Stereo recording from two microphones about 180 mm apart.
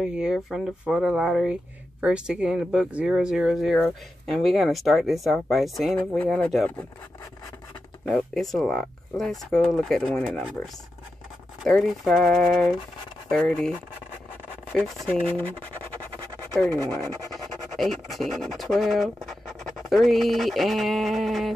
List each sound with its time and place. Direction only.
0.0 s speech: 5° right (ahead or behind)
8.1 s speech: centre (ahead or behind)
16.7 s speech: 20° right (ahead or behind)
17.7 s speech: centre (ahead or behind)
19.2 s a sound: centre (ahead or behind)